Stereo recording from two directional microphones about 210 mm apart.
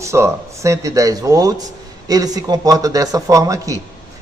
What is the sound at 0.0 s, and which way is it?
A man's voice, 15° right (ahead or behind).